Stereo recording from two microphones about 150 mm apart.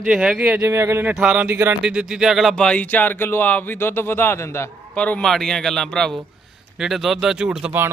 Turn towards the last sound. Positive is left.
turn(degrees=-10)  # may be behind; listen again after turning